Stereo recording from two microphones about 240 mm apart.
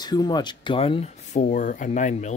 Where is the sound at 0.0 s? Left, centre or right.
Centre.